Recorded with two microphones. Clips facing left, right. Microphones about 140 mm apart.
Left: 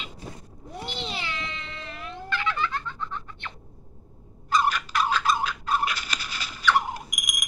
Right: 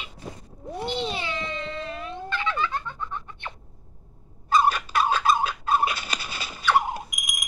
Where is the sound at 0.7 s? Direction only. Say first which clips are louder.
Right 5 dB; 20° right (ahead or behind).